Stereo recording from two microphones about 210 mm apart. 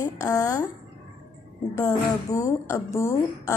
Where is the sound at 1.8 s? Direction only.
15° left (ahead or behind).